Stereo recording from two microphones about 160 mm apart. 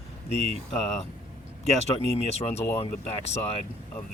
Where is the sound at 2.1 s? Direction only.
40° left (ahead or behind).